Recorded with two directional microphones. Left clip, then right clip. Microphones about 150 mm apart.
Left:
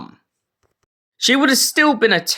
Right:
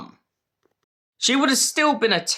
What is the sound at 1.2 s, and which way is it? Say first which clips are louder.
Speech: left 5 dB; 25° left (ahead or behind).